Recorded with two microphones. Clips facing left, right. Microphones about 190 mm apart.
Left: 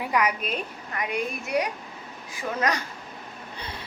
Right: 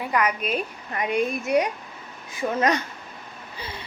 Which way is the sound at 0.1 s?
10° left (ahead or behind).